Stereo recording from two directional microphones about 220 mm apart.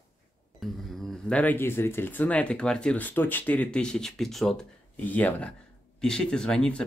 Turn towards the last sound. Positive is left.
turn(degrees=5)  # may be behind; listen again after turning